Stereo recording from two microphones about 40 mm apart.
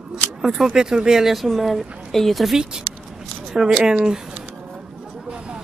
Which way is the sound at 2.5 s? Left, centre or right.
Centre.